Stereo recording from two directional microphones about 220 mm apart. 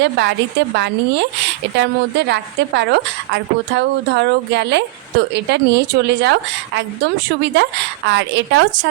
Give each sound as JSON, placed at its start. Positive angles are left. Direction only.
{"t": 0.0, "sound": "a woman's voice", "side_deg": -50}